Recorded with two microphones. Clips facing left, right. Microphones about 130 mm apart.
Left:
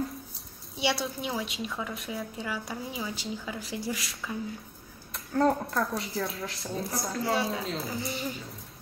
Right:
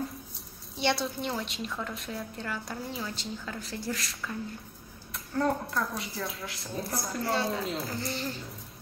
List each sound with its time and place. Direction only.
0.7 s a woman's voice: 5° left (ahead or behind)
5.4 s a woman's voice: 30° left (ahead or behind)
6.6 s a woman's voice: centre (ahead or behind)